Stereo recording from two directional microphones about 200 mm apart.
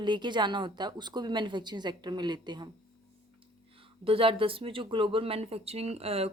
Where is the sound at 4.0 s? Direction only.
25° right (ahead or behind).